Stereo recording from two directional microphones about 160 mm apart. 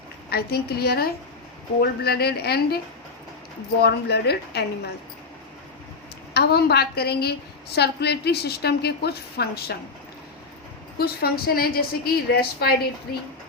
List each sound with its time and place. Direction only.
0.3 s a woman's voice: 80° left
6.3 s a woman's voice: 90° left
10.9 s a woman's voice: 75° left (ahead or behind)